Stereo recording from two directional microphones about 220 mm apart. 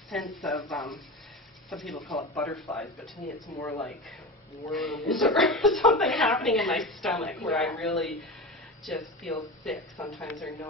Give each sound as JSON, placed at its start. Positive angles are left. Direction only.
{"t": 0.1, "sound": "a woman's voice", "side_deg": 0}
{"t": 2.6, "sound": "speech", "side_deg": 10}
{"t": 4.7, "sound": "a woman's voice", "side_deg": 0}